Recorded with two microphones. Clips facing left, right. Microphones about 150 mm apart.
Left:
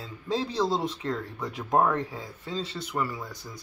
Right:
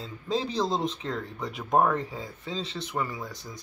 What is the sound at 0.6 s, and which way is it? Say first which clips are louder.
Speech: left 1 dB; 20° right (ahead or behind).